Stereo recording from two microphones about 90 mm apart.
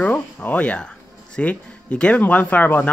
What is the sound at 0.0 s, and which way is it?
Speech, 20° left (ahead or behind).